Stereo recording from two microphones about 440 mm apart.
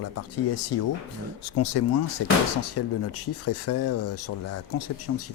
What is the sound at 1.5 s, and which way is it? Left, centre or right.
Speech, left.